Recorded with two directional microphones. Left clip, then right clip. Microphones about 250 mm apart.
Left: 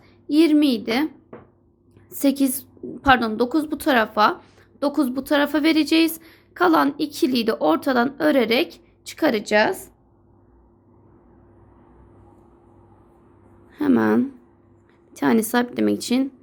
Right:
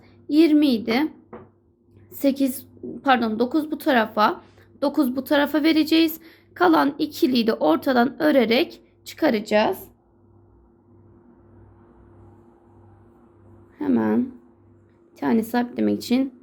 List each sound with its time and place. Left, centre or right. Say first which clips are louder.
0.3 s a woman's voice: even; centre
13.7 s a sound: left 3 dB; centre
15.1 s a woman's voice: left 3 dB; centre